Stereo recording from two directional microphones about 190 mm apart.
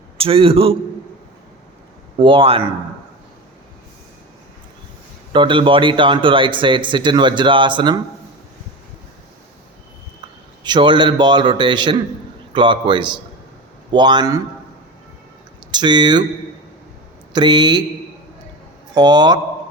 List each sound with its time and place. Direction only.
0.2 s speech: 30° right (ahead or behind)
2.1 s speech: 25° right (ahead or behind)
5.3 s speech: 25° right (ahead or behind)
10.6 s speech: 25° right (ahead or behind)
15.7 s speech: 25° right (ahead or behind)
17.3 s speech: 25° right (ahead or behind)
18.9 s speech: 20° right (ahead or behind)